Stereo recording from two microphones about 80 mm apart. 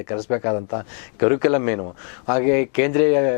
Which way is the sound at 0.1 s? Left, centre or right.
Centre.